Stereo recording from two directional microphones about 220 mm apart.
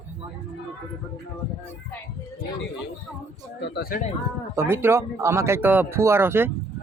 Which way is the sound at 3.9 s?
40° left (ahead or behind).